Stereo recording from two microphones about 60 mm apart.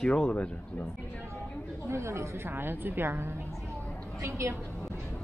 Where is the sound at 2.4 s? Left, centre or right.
Right.